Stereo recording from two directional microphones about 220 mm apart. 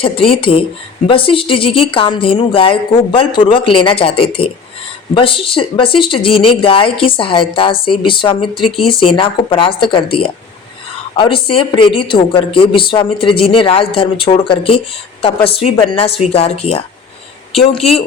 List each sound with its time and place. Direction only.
0.0 s a woman's voice: 25° left (ahead or behind)
11.4 s a woman's voice: 25° left (ahead or behind)